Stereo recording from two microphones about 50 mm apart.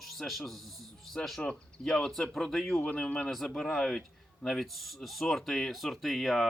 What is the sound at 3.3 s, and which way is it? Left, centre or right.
Speech, centre.